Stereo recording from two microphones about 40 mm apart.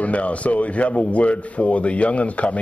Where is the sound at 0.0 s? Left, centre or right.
Left.